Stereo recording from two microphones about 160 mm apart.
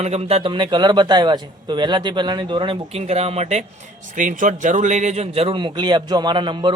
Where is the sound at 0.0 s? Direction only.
40° right (ahead or behind).